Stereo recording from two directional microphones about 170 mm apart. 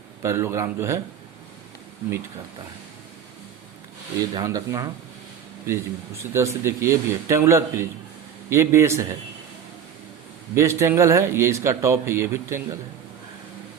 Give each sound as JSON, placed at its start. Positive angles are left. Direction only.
{"t": 0.2, "sound": "a man's voice", "side_deg": -15}
{"t": 4.4, "sound": "speech", "side_deg": -20}
{"t": 6.3, "sound": "a man's voice", "side_deg": -15}
{"t": 10.5, "sound": "a man's voice", "side_deg": -15}